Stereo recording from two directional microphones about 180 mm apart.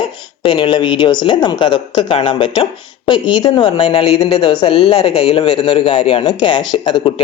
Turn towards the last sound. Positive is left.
turn(degrees=25)  # may be behind; listen again after turning